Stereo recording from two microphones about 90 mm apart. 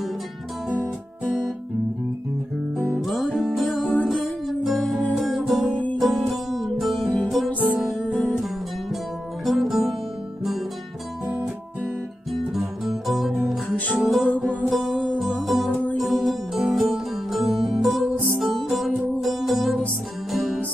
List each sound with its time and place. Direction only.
3.0 s music: centre (ahead or behind)
7.6 s music: 15° right (ahead or behind)
9.4 s music: centre (ahead or behind)
12.5 s music: centre (ahead or behind)